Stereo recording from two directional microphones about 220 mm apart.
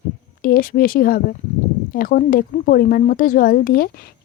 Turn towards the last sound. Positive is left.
turn(degrees=40)  # may be behind; listen again after turning